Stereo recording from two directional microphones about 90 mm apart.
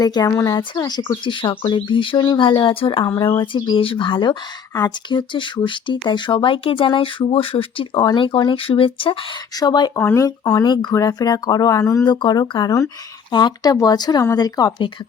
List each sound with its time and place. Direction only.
0.0 s speech: 45° left (ahead or behind); by 3.0 s 70° left (ahead or behind)
3.1 s speech: 35° left (ahead or behind)
3.3 s speech: 65° left (ahead or behind)
9.6 s speech: 50° left (ahead or behind)
12.0 s speech: 55° left (ahead or behind)